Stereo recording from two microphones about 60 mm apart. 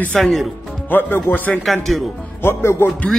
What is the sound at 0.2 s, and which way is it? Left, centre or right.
Speech, centre.